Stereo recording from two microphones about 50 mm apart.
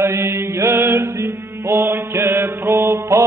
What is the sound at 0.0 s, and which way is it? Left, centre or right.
Mantra, right.